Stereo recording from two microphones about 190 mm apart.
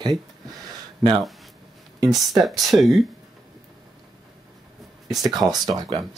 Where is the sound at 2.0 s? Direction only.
Centre (ahead or behind).